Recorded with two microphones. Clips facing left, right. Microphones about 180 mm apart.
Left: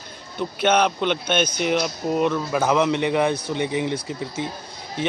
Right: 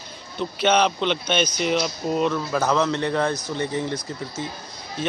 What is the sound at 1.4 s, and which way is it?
Speech, 55° left (ahead or behind).